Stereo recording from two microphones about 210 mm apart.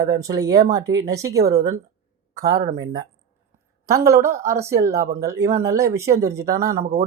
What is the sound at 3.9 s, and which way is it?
Speech, 15° right (ahead or behind).